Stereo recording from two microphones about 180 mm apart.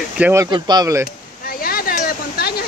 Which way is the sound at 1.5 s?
55° left (ahead or behind).